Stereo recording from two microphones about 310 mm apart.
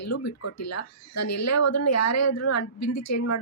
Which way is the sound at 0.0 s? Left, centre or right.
Left.